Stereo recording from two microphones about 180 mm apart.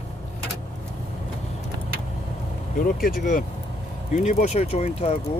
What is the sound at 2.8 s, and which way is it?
Speech, 50° left (ahead or behind).